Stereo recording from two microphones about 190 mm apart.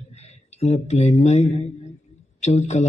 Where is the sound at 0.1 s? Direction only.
35° left (ahead or behind).